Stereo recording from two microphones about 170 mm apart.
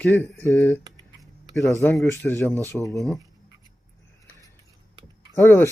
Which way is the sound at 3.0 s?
Centre (ahead or behind).